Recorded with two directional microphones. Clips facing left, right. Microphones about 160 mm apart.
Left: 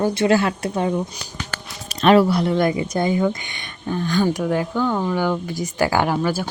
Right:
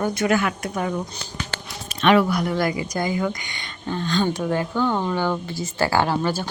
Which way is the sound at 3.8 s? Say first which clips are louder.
Left 3 dB; 10° left (ahead or behind).